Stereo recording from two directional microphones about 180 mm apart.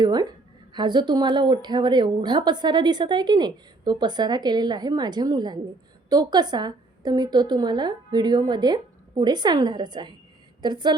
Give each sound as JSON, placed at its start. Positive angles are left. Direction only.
{"t": 0.0, "sound": "a woman's voice", "side_deg": -20}